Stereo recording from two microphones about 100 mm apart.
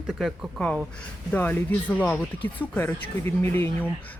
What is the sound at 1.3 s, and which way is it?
Speech, 20° left (ahead or behind).